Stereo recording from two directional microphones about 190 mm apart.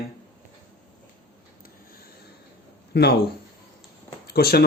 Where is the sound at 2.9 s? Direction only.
60° left (ahead or behind).